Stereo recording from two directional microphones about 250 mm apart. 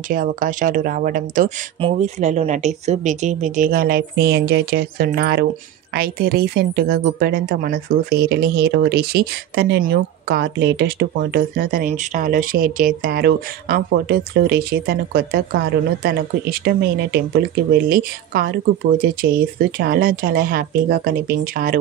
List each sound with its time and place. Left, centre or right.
0.1 s speech: right
17.8 s speech: right